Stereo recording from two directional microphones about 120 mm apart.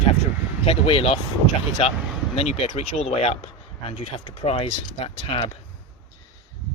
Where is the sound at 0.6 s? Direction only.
50° left (ahead or behind).